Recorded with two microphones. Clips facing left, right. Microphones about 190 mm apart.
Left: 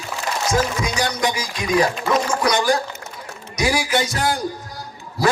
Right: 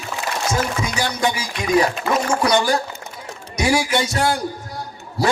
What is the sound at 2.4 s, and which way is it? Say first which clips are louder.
Speech: right 2 dB; 30° right (ahead or behind).